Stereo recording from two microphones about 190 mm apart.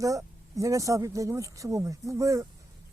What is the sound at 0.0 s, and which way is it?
Speech, 15° right (ahead or behind).